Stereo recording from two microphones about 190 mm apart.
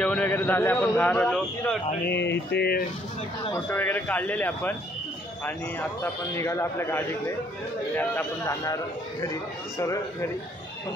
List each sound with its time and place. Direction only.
0.0 s a man's voice: 5° left (ahead or behind)
2.0 s mantra: 65° left (ahead or behind)
3.5 s a man's voice: 10° left (ahead or behind)
6.3 s a man's voice: 15° left (ahead or behind)